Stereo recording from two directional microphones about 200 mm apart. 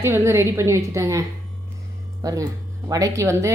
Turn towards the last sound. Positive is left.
turn(degrees=-15)  # may be behind; listen again after turning